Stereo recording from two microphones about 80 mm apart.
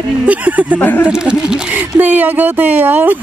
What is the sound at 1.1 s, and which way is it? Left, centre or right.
Speech, centre.